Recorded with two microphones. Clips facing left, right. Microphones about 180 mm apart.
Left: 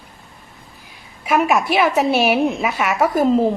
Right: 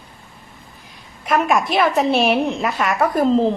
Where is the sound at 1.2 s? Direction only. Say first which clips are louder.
Left 1 dB; 5° left (ahead or behind).